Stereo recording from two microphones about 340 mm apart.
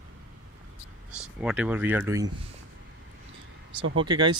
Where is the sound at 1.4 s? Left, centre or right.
Centre.